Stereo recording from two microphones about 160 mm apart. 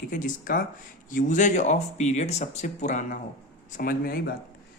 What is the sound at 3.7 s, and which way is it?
Speech, 65° left (ahead or behind).